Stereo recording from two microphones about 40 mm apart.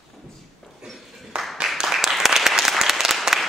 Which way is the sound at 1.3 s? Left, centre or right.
Right.